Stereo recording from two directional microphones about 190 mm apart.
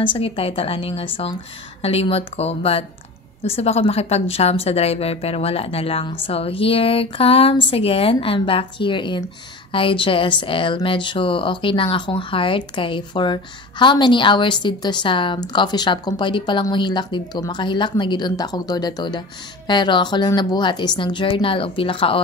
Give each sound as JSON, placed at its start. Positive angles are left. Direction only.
{"t": 0.0, "sound": "a woman's voice", "side_deg": 30}